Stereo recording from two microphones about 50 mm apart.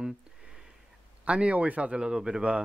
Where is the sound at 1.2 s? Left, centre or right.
Right.